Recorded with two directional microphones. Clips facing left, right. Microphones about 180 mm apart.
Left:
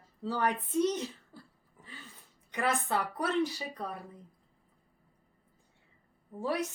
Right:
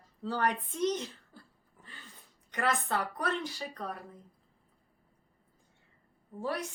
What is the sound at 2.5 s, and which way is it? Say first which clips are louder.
Speech: left 1 dB; 10° left (ahead or behind).